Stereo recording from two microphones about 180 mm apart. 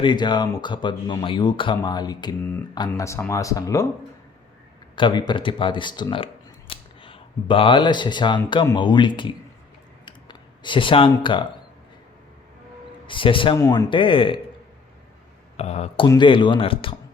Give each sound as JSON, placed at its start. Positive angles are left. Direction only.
{"t": 0.0, "sound": "speech", "side_deg": 25}
{"t": 4.9, "sound": "speech", "side_deg": 25}
{"t": 10.1, "sound": "a sound", "side_deg": 25}
{"t": 13.1, "sound": "speech", "side_deg": 30}
{"t": 15.5, "sound": "speech", "side_deg": 35}
{"t": 16.0, "sound": "speech", "side_deg": 25}